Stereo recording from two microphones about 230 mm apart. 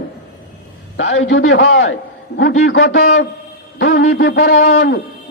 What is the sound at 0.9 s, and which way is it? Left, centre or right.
A man's voice, left.